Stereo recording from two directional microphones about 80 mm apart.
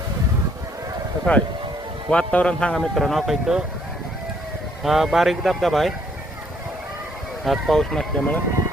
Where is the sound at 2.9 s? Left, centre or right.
Centre.